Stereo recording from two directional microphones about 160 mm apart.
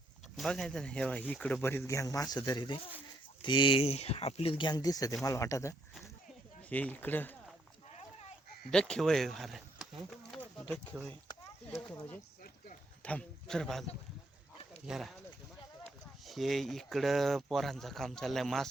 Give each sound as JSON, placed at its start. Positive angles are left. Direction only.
{"t": 0.3, "sound": "speech", "side_deg": 0}
{"t": 7.9, "sound": "a sound", "side_deg": 45}
{"t": 8.7, "sound": "speech", "side_deg": 5}
{"t": 10.1, "sound": "a sound", "side_deg": 0}
{"t": 13.0, "sound": "speech", "side_deg": 10}
{"t": 14.8, "sound": "speech", "side_deg": 0}
{"t": 16.2, "sound": "speech", "side_deg": 0}